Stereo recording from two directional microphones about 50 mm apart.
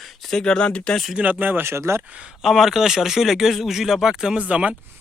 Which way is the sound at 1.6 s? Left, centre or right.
Right.